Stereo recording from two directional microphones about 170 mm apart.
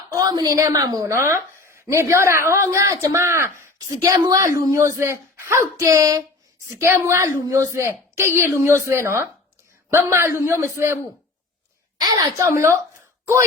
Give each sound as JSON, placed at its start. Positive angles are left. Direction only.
{"t": 0.1, "sound": "a woman's voice", "side_deg": -20}
{"t": 12.0, "sound": "a woman's voice", "side_deg": -20}